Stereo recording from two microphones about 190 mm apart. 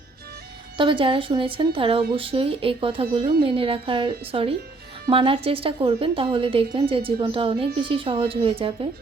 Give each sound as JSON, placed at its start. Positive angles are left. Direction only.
{"t": 0.8, "sound": "a woman's voice", "side_deg": -25}